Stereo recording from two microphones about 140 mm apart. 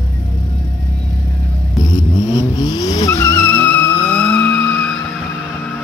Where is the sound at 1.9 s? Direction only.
30° left (ahead or behind).